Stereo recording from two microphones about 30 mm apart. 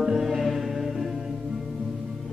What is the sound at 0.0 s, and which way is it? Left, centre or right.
Mantra, centre.